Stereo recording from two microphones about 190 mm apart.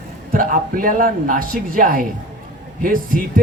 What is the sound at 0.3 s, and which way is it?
Speech, 45° right (ahead or behind).